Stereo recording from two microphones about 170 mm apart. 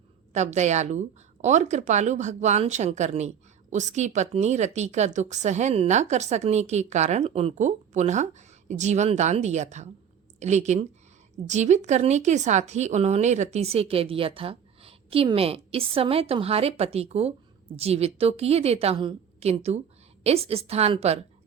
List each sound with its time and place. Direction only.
0.3 s a woman's voice: 40° right (ahead or behind)